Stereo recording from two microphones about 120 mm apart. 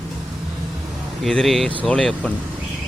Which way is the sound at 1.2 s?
Centre (ahead or behind).